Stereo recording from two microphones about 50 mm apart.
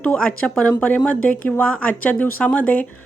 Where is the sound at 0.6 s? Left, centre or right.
Left.